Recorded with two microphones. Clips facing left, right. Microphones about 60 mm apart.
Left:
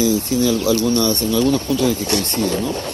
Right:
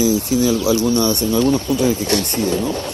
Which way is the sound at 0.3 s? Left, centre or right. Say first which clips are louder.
Right 1 dB; right.